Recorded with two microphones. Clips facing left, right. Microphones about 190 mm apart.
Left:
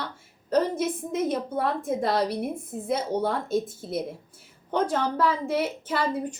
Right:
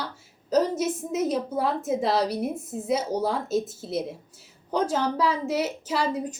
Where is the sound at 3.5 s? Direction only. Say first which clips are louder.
Even; 25° right (ahead or behind).